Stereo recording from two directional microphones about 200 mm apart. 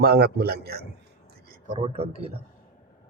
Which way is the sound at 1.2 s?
50° right (ahead or behind).